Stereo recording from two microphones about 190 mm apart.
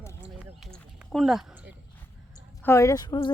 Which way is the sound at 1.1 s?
Centre (ahead or behind).